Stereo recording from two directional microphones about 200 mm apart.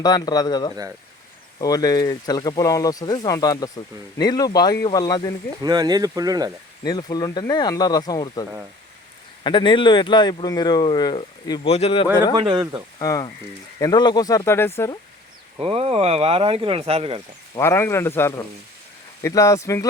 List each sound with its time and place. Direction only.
0.0 s speech: 20° left (ahead or behind)
5.6 s speech: 20° right (ahead or behind)
6.8 s speech: 20° left (ahead or behind)
12.3 s speech: 20° right (ahead or behind)
13.0 s speech: 15° left (ahead or behind)
15.6 s speech: 30° right (ahead or behind)
17.5 s speech: 15° left (ahead or behind)